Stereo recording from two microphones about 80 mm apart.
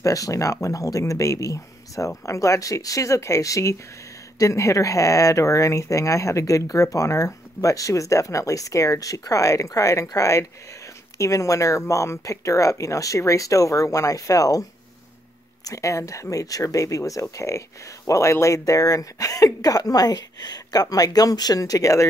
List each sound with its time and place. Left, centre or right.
0.0 s speech: left
15.6 s speech: left